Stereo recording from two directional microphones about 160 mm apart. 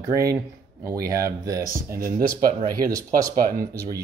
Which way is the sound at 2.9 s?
20° right (ahead or behind).